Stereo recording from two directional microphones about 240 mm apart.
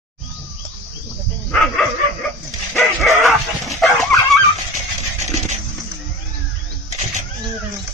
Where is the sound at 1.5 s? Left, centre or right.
Centre.